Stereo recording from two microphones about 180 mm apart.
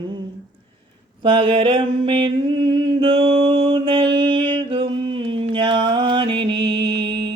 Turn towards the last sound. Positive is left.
turn(degrees=-25)  # may be behind; listen again after turning